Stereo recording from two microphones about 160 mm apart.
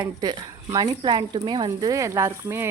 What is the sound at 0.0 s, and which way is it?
Speech, 25° right (ahead or behind).